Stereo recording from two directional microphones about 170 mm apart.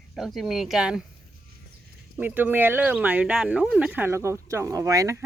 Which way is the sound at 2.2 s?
10° right (ahead or behind).